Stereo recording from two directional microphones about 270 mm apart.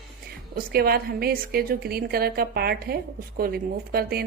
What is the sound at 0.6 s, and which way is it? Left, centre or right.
Speech, right.